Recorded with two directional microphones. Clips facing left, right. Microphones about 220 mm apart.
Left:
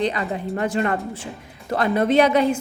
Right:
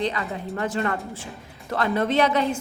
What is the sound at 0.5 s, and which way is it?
A woman's voice, 20° left (ahead or behind).